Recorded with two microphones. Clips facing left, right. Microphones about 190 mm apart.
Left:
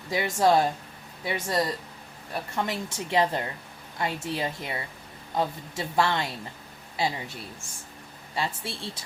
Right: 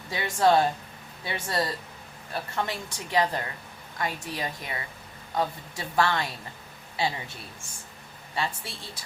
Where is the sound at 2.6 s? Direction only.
25° left (ahead or behind).